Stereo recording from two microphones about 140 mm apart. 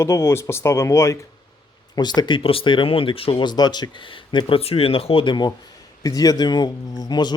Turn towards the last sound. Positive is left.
turn(degrees=30)  # may be behind; listen again after turning